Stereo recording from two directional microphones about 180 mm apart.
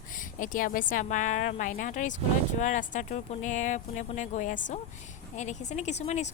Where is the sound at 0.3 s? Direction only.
45° left (ahead or behind).